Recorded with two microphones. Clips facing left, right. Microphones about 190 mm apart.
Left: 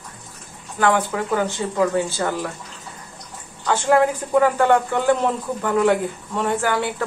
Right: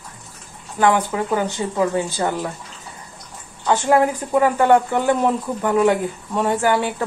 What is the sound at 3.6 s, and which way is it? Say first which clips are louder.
Speech: right 1 dB; 15° right (ahead or behind).